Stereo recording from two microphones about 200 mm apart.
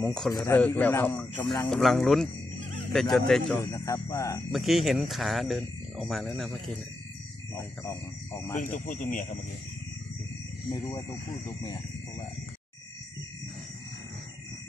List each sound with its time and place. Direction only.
0.0 s speech: 5° left (ahead or behind)
3.6 s speech: 15° left (ahead or behind)
4.5 s speech: centre (ahead or behind)
7.5 s speech: 15° left (ahead or behind)
8.5 s speech: 40° left (ahead or behind)
10.7 s speech: 20° left (ahead or behind)